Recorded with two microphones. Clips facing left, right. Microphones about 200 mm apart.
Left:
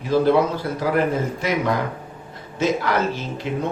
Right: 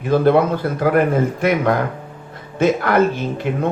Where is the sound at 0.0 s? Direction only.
55° right (ahead or behind).